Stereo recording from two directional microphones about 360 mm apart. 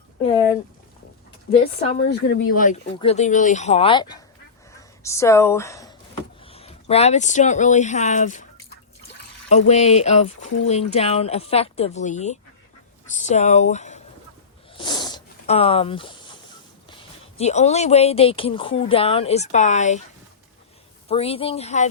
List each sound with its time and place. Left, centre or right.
1.5 s speech: left
9.5 s speech: centre
14.7 s a sound: centre
17.3 s speech: centre
21.1 s speech: centre